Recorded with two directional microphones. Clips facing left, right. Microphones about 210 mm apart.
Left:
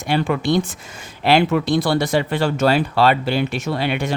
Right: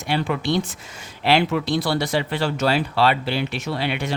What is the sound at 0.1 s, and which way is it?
Speech, 50° left (ahead or behind).